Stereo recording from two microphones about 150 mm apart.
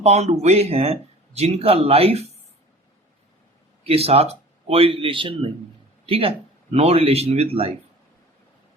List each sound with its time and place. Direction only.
0.0 s speech: 45° right (ahead or behind)
3.8 s speech: 40° right (ahead or behind)